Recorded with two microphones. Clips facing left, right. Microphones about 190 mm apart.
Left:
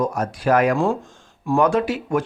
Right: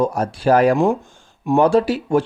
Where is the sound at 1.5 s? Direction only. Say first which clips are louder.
Right 4 dB; 30° right (ahead or behind).